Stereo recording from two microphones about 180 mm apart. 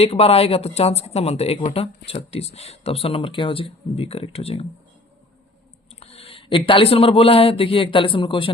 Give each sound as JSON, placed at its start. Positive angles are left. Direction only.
{"t": 0.0, "sound": "speech", "side_deg": 35}
{"t": 6.0, "sound": "speech", "side_deg": 35}